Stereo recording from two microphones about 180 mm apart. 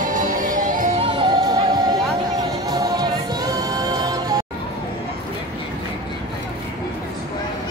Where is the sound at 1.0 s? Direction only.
25° right (ahead or behind).